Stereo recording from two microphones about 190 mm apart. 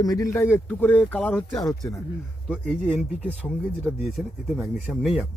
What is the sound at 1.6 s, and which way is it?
Speech, 20° left (ahead or behind).